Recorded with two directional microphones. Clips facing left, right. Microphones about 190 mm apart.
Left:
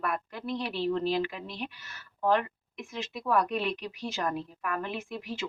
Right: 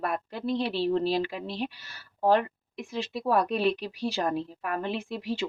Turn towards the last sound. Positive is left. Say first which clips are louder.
# right 5 dB
turn(degrees=-30)  # may be behind; listen again after turning